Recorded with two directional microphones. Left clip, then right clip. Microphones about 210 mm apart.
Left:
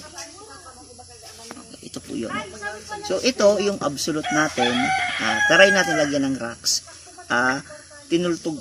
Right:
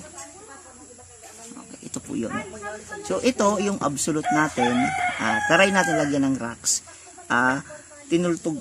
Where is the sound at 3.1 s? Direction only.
50° right (ahead or behind).